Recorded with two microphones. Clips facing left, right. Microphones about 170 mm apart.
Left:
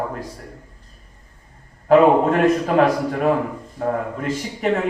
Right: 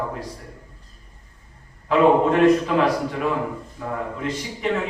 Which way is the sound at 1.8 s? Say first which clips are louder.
Left 3 dB; 45° left (ahead or behind).